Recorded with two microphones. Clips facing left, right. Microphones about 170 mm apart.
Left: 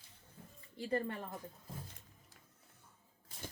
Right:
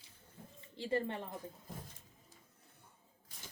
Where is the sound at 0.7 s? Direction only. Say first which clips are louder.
Right 1 dB; 25° right (ahead or behind).